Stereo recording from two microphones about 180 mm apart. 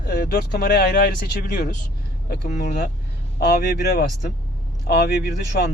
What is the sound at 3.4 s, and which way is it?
Speech, 65° left (ahead or behind).